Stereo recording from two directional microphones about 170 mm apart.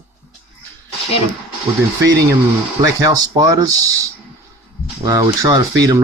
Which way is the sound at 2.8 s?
20° right (ahead or behind).